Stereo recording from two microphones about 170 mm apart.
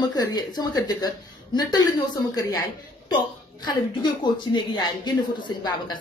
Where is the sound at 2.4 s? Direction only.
20° left (ahead or behind).